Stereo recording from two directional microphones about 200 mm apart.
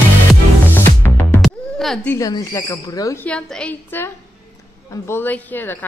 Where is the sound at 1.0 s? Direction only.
10° left (ahead or behind).